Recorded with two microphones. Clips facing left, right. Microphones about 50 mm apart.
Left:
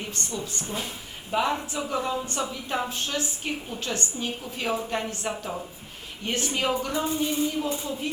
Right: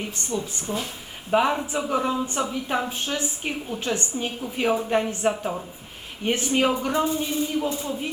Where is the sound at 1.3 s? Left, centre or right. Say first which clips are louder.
Right 5 dB; right.